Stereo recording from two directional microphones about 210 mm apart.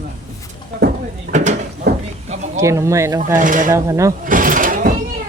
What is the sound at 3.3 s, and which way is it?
Speech, 40° right (ahead or behind).